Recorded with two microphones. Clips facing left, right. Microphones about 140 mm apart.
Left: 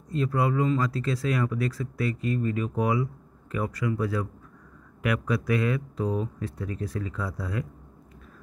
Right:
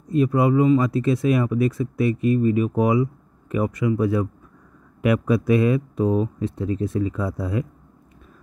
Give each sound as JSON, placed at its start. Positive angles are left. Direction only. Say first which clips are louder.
{"t": 0.1, "sound": "speech", "louder": "right 8 dB", "side_deg": -20}